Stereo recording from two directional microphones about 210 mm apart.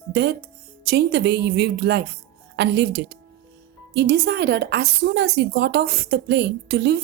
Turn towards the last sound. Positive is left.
turn(degrees=-50)  # may be behind; listen again after turning